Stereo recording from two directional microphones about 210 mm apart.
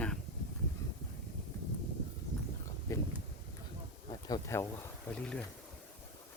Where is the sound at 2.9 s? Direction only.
15° left (ahead or behind).